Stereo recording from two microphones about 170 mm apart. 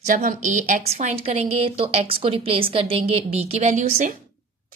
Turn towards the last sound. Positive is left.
turn(degrees=-45)  # may be behind; listen again after turning